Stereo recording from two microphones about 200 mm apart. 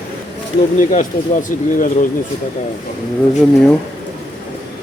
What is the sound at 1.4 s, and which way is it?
Speech, 40° left (ahead or behind).